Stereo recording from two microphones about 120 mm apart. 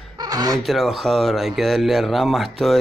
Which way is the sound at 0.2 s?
35° right (ahead or behind).